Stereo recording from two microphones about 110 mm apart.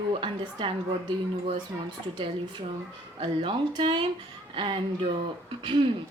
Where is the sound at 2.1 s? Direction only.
45° right (ahead or behind).